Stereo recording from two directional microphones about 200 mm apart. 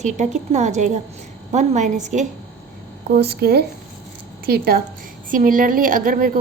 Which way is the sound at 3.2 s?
55° right (ahead or behind).